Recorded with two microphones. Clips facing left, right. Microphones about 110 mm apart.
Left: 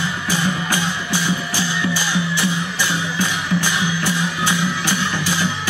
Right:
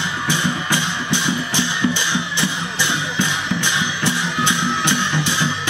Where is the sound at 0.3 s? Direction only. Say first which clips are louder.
Even; 20° right (ahead or behind).